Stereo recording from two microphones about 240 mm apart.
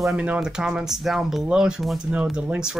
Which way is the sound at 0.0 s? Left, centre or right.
Centre.